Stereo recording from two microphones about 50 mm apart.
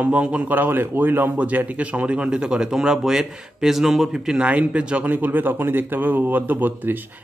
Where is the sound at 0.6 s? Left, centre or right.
Right.